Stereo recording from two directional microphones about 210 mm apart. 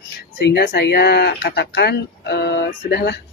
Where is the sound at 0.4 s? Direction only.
55° left (ahead or behind).